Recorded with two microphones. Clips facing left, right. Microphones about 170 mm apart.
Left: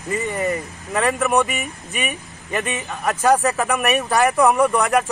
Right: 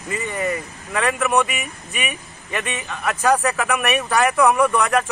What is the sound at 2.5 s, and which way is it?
Speech, 35° left (ahead or behind).